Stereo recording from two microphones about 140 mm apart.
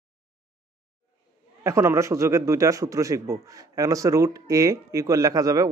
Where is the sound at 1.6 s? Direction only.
20° right (ahead or behind).